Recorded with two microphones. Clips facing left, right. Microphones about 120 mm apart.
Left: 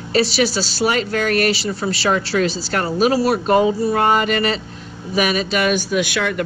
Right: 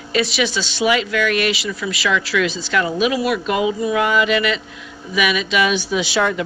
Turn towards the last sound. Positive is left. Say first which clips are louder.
# left 2 dB
turn(degrees=50)  # may be behind; listen again after turning